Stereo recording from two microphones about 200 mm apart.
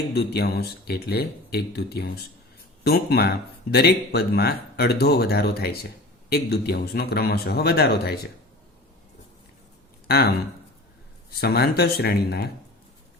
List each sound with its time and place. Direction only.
0.1 s speech: 55° left (ahead or behind)
10.1 s speech: 50° left (ahead or behind)